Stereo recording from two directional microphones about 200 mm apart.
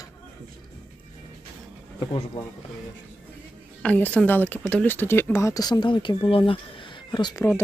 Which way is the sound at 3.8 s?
10° left (ahead or behind).